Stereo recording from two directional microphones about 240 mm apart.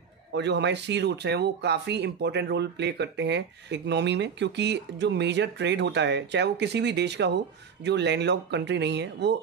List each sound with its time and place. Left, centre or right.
0.3 s speech: right